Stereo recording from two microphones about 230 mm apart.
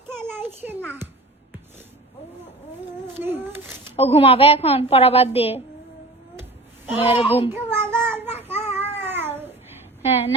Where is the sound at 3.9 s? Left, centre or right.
Left.